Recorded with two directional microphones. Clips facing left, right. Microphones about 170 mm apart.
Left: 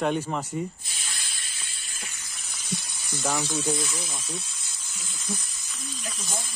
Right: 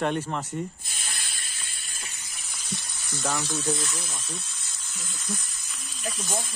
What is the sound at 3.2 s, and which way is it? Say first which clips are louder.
Speech: left 1 dB; 5° left (ahead or behind).